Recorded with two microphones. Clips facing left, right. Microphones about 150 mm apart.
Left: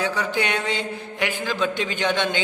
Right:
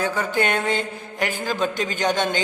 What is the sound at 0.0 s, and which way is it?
A man's voice, 50° right (ahead or behind).